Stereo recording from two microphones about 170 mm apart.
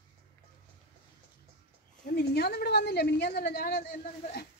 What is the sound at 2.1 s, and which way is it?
A woman's voice, 70° left (ahead or behind).